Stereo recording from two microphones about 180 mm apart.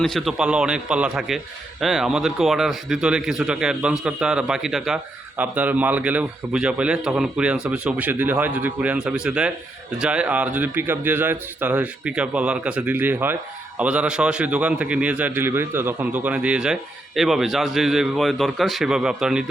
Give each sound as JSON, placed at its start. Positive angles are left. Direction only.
{"t": 0.0, "sound": "a man's voice", "side_deg": 0}